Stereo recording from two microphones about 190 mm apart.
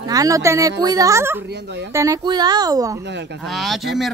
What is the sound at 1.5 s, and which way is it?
Speech, 65° right (ahead or behind).